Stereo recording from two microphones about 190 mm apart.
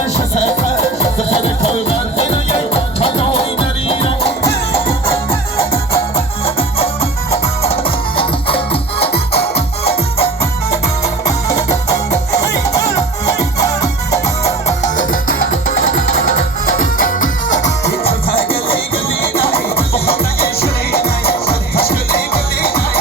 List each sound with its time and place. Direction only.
0.1 s music: 35° left (ahead or behind)
4.4 s music: 15° left (ahead or behind)
6.4 s music: 30° left (ahead or behind)
9.1 s music: 55° left (ahead or behind)
9.6 s music: 30° left (ahead or behind)
13.6 s music: 15° left (ahead or behind)
14.3 s music: 35° left (ahead or behind)
16.8 s music: 45° left (ahead or behind)
17.8 s music: 50° left (ahead or behind)
19.5 s music: 55° left (ahead or behind)